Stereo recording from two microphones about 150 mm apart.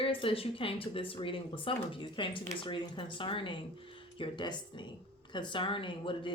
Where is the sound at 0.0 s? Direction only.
35° left (ahead or behind).